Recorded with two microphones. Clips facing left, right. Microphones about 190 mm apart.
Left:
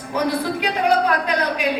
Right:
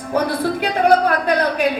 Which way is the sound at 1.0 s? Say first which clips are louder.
Right 3 dB; 50° right (ahead or behind).